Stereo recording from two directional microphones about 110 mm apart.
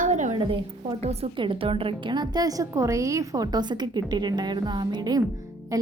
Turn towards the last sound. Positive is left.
turn(degrees=-30)  # may be behind; listen again after turning